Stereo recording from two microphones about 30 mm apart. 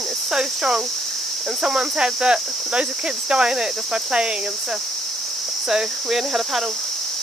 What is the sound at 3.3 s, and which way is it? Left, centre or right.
Speech, right.